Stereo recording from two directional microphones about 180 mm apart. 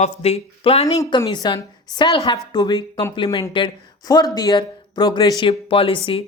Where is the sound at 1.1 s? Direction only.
25° left (ahead or behind).